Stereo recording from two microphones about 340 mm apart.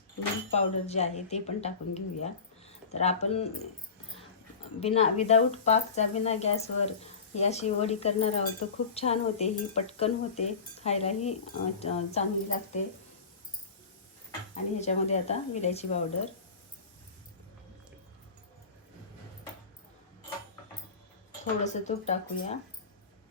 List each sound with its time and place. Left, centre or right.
0.5 s speech: centre
4.8 s speech: centre
14.5 s speech: centre
21.6 s speech: centre